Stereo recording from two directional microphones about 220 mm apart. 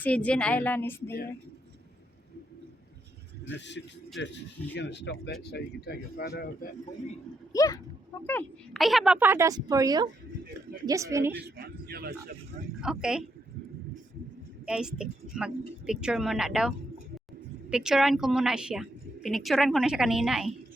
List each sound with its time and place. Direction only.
0.0 s speech: 5° left (ahead or behind)
3.8 s speech: 55° left (ahead or behind)
7.5 s speech: 15° left (ahead or behind)
8.3 s speech: 5° left (ahead or behind); by 11.3 s 10° right (ahead or behind)
11.3 s a man's voice: 45° right (ahead or behind)
12.8 s a woman's voice: 5° right (ahead or behind)
14.7 s a woman's voice: 5° right (ahead or behind)